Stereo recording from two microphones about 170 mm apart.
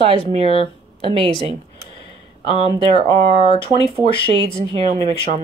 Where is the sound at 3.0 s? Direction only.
30° left (ahead or behind).